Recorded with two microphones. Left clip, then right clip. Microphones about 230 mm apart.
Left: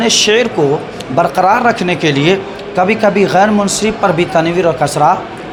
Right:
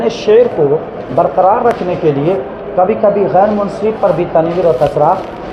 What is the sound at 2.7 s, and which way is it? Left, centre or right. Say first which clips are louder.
Speech: right 1 dB; left.